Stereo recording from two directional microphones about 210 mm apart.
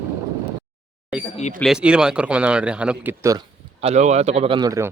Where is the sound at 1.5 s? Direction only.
Centre (ahead or behind).